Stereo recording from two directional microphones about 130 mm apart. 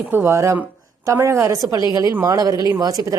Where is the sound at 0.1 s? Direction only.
20° right (ahead or behind).